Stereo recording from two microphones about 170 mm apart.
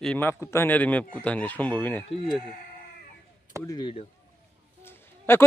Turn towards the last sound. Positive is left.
turn(degrees=15)  # may be behind; listen again after turning